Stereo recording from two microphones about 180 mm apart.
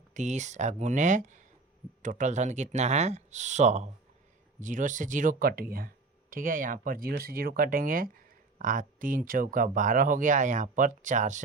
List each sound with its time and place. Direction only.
0.1 s speech: 40° right (ahead or behind)